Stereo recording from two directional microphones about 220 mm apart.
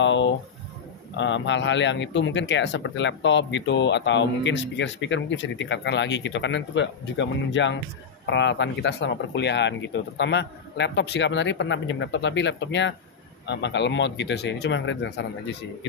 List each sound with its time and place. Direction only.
0.0 s speech: 55° left (ahead or behind)